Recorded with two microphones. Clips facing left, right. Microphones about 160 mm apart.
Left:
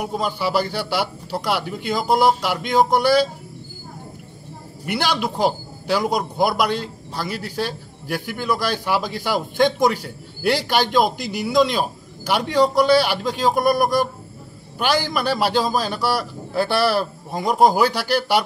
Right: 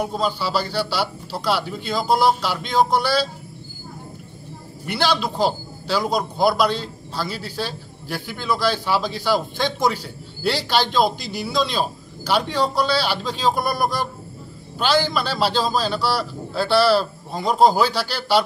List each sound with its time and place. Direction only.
0.1 s a man's voice: 15° left (ahead or behind)
4.8 s a man's voice: 15° left (ahead or behind)